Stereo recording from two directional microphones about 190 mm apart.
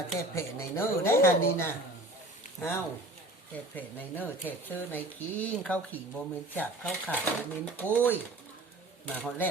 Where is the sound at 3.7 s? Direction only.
10° left (ahead or behind).